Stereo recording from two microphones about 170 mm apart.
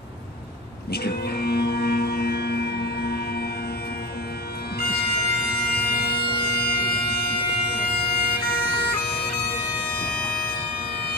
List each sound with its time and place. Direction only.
0.9 s music: 70° left (ahead or behind)
4.7 s bagpipes: 65° left (ahead or behind)
6.3 s music: 65° left (ahead or behind)
7.8 s bagpipes: 65° left (ahead or behind)
9.8 s music: 65° left (ahead or behind)